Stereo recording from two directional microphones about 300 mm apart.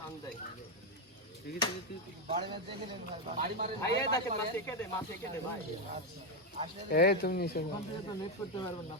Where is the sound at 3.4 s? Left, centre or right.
Right.